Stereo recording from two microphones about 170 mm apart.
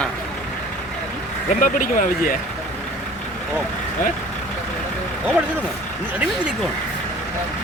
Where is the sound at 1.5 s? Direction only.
50° left (ahead or behind).